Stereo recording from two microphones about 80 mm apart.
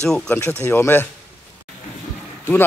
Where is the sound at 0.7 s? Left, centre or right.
Left.